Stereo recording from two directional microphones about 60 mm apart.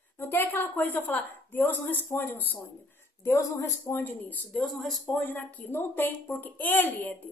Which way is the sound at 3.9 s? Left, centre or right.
Left.